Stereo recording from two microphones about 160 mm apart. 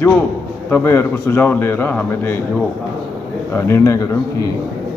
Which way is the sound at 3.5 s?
15° left (ahead or behind).